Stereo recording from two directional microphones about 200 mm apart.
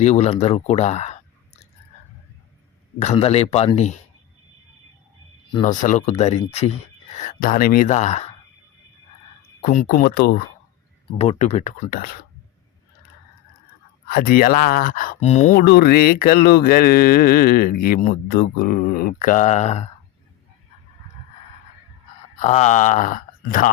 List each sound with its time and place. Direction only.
0.0 s speech: 35° left (ahead or behind)
3.0 s speech: 30° left (ahead or behind)
5.6 s speech: 40° left (ahead or behind)
7.2 s speech: 45° left (ahead or behind)
9.6 s speech: 40° left (ahead or behind)
11.2 s speech: 30° left (ahead or behind)
11.9 s speech: 45° left (ahead or behind)
14.1 s speech: 50° left (ahead or behind)
15.6 s speech: 50° left (ahead or behind); by 19.9 s 30° left (ahead or behind)
22.4 s speech: 35° left (ahead or behind)